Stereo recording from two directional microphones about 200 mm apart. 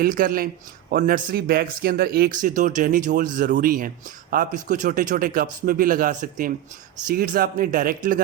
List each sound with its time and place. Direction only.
0.0 s a man's voice: 45° right (ahead or behind)